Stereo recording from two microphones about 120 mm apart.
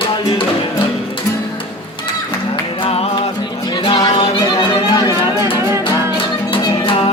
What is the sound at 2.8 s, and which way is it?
Music, 55° left (ahead or behind).